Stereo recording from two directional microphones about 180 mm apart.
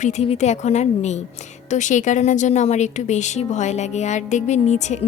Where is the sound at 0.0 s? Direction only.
40° left (ahead or behind).